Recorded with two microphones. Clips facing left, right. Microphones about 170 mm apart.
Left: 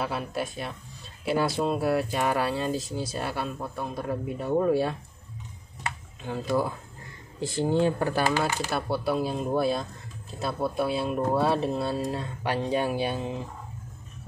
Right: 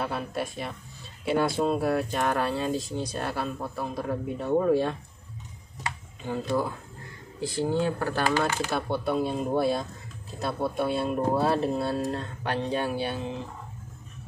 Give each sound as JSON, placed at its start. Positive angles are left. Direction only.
{"t": 0.0, "sound": "speech", "side_deg": 0}
{"t": 6.2, "sound": "speech", "side_deg": 0}
{"t": 7.4, "sound": "speech", "side_deg": 20}
{"t": 8.1, "sound": "speech", "side_deg": 10}